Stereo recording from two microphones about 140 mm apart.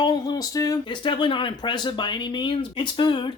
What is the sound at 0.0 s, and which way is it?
Speech, 30° left (ahead or behind).